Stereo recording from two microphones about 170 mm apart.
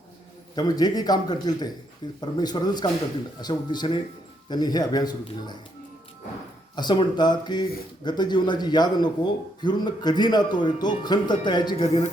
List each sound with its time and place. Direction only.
0.5 s speech: 25° left (ahead or behind)
6.7 s speech: 25° left (ahead or behind)